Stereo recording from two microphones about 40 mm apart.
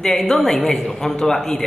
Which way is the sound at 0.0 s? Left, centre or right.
Centre.